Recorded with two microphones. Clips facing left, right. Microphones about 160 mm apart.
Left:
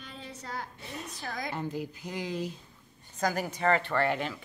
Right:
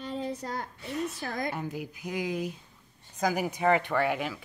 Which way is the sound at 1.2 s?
50° right (ahead or behind).